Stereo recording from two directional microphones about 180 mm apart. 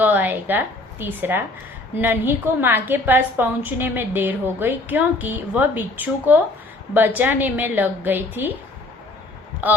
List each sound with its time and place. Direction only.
0.0 s a woman's voice: 10° right (ahead or behind)
9.6 s a woman's voice: 10° right (ahead or behind)